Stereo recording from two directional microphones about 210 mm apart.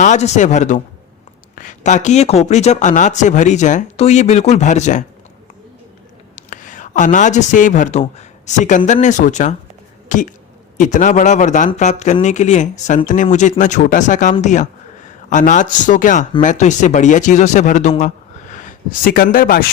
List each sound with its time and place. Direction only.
0.0 s a man's voice: 35° left (ahead or behind)
6.3 s a man's voice: 40° left (ahead or behind)